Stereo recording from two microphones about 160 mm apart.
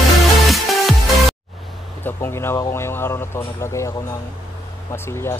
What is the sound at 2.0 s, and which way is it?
Speech, 15° left (ahead or behind).